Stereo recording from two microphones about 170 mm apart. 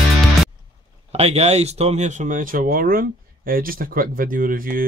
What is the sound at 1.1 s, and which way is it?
Speech, 40° right (ahead or behind).